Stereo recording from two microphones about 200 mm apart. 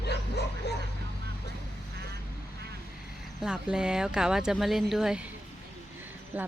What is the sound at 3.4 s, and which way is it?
Speech, 5° right (ahead or behind).